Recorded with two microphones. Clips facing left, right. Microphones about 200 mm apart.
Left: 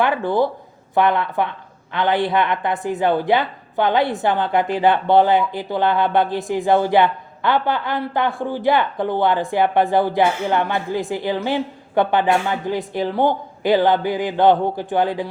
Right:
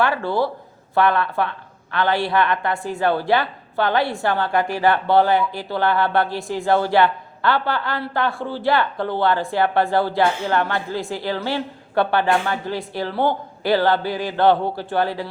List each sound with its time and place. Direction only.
0.0 s a woman's voice: 20° left (ahead or behind)